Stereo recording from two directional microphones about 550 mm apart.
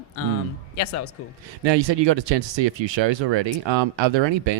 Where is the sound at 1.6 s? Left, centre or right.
Right.